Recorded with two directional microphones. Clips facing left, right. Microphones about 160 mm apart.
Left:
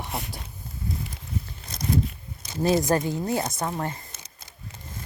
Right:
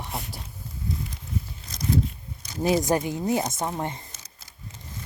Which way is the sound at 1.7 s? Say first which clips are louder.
Even; 55° left (ahead or behind).